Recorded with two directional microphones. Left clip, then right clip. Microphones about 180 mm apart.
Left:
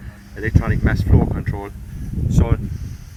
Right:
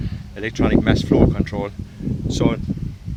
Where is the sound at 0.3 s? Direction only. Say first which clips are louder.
Right 5 dB; 50° right (ahead or behind).